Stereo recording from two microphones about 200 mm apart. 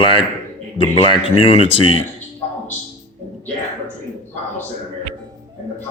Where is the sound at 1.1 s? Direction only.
30° left (ahead or behind).